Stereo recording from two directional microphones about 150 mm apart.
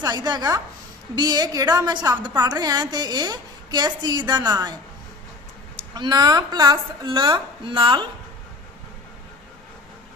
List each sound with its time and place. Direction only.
0.0 s a woman's voice: 25° right (ahead or behind)
5.9 s a woman's voice: 25° right (ahead or behind)